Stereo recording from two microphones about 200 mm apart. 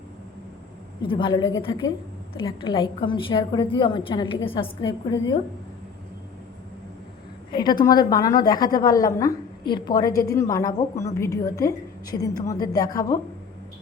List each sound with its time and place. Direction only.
1.0 s a woman's voice: 25° left (ahead or behind)
7.5 s a woman's voice: 20° left (ahead or behind)